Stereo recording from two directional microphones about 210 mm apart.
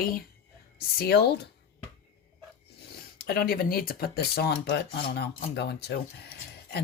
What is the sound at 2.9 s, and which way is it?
Speech, 50° left (ahead or behind).